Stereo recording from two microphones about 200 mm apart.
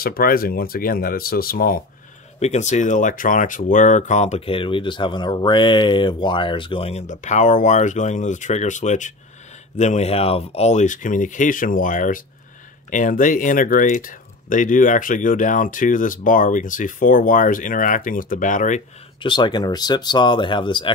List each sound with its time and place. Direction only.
0.0 s speech: 50° left (ahead or behind)
2.4 s speech: 35° left (ahead or behind)
19.2 s speech: 25° left (ahead or behind)